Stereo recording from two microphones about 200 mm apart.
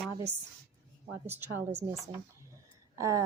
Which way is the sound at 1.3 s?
10° right (ahead or behind).